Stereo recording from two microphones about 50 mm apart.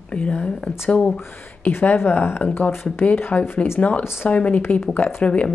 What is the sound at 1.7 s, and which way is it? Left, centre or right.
Speech, left.